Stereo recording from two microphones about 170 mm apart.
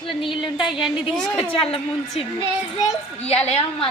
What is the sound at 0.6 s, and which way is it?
Speech, centre (ahead or behind).